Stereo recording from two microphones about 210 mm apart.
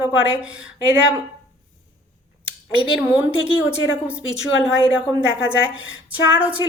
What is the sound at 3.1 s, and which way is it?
Speech, 5° right (ahead or behind).